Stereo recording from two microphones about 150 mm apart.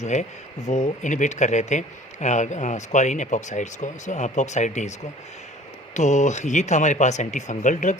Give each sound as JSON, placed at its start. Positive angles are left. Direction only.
{"t": 0.0, "sound": "speech", "side_deg": 50}